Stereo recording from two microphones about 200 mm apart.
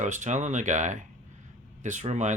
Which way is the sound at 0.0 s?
35° right (ahead or behind).